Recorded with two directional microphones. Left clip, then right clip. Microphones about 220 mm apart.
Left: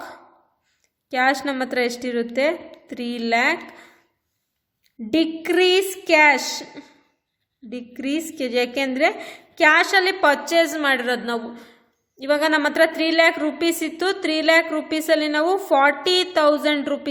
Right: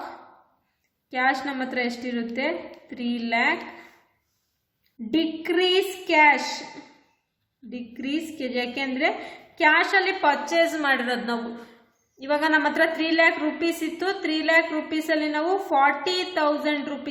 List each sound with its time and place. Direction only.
1.1 s a woman's voice: 50° left (ahead or behind)
5.1 s a woman's voice: 50° left (ahead or behind)
7.7 s a woman's voice: 50° left (ahead or behind)